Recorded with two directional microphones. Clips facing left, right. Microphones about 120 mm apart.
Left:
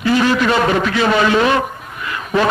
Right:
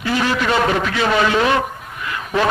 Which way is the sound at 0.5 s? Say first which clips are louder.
Left 2 dB; 25° left (ahead or behind).